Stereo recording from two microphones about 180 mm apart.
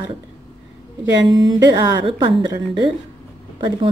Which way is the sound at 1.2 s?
25° right (ahead or behind).